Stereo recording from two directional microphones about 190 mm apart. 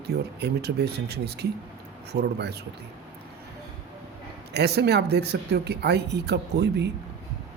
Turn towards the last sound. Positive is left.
turn(degrees=-60)  # may be behind; listen again after turning